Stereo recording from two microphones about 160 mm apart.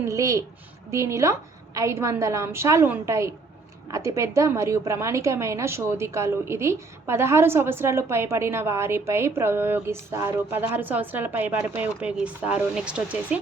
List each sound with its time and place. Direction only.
0.0 s a woman's voice: 20° right (ahead or behind)